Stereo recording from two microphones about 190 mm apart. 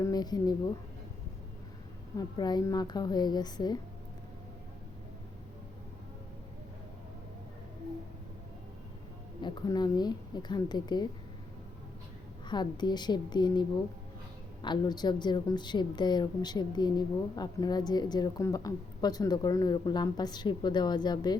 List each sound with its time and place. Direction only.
0.0 s speech: 20° left (ahead or behind)
2.1 s a woman's voice: 20° left (ahead or behind)
9.4 s a woman's voice: 20° left (ahead or behind)
12.5 s a woman's voice: 25° left (ahead or behind)